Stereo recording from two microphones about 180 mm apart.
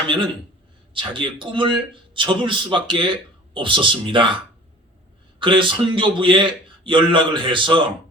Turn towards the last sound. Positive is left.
turn(degrees=-25)  # may be behind; listen again after turning